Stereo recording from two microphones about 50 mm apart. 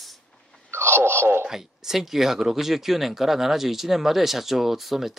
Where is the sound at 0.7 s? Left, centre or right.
Right.